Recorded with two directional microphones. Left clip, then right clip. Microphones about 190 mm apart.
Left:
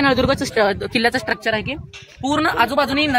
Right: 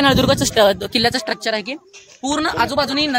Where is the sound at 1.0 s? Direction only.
5° right (ahead or behind).